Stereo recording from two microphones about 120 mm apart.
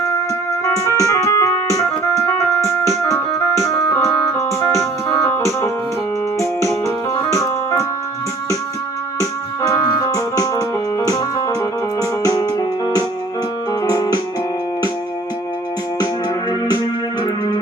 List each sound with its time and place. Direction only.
0.6 s keyboard: 25° left (ahead or behind)
9.6 s keyboard: 30° left (ahead or behind)
12.2 s music: 30° left (ahead or behind)